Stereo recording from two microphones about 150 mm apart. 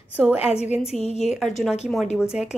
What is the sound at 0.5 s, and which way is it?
Speech, 45° left (ahead or behind).